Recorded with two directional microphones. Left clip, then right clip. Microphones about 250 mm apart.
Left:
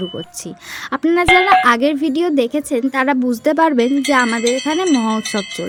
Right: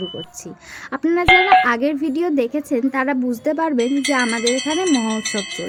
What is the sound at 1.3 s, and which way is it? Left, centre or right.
Speech, centre.